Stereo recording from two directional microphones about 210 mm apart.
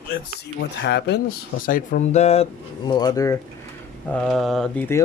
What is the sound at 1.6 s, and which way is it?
Speech, 40° left (ahead or behind).